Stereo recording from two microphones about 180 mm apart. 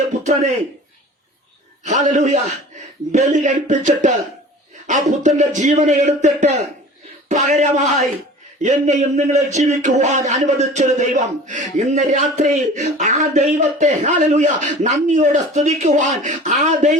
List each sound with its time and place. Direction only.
1.8 s a man's voice: 40° right (ahead or behind)